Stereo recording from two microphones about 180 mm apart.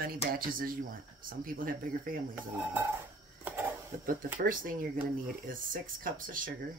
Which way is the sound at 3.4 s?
10° right (ahead or behind).